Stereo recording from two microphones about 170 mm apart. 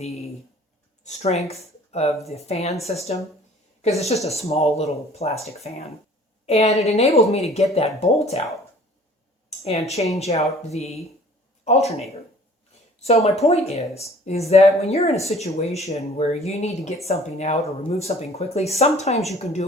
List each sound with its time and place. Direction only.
0.0 s a woman's voice: 40° left (ahead or behind)
9.6 s speech: 40° left (ahead or behind)